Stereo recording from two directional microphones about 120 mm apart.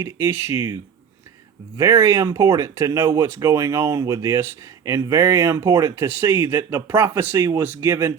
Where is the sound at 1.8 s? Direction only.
25° right (ahead or behind).